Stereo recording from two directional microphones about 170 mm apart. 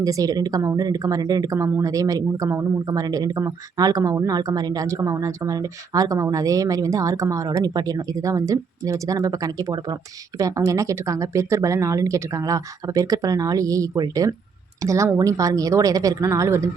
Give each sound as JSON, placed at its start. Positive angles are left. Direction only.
{"t": 0.0, "sound": "speech", "side_deg": -20}